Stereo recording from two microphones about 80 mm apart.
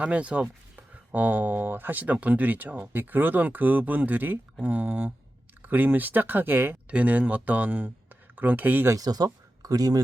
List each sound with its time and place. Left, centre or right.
0.0 s speech: centre
9.0 s speech: right